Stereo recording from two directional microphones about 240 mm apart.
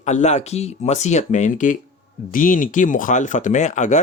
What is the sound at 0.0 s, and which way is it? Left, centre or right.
Speech, left.